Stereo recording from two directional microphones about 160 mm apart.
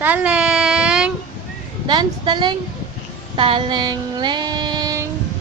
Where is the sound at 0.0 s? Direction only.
10° right (ahead or behind).